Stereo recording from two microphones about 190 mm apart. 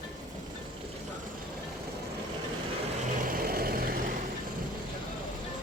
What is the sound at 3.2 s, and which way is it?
Vehicle, 50° right (ahead or behind).